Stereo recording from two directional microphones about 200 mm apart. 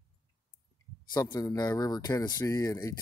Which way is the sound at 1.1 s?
15° left (ahead or behind).